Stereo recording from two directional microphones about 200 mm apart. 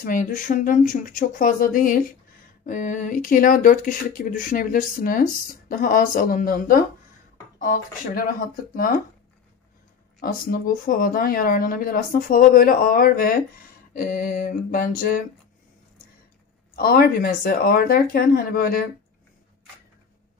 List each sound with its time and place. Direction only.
0.0 s speech: 40° left (ahead or behind)
10.2 s speech: 45° left (ahead or behind)
16.7 s speech: 50° left (ahead or behind)